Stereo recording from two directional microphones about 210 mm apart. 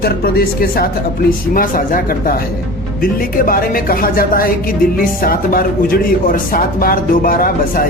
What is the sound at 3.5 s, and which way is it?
Speech, 45° left (ahead or behind).